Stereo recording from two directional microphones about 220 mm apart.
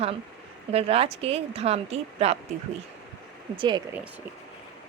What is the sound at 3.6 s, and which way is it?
Speech, 20° right (ahead or behind).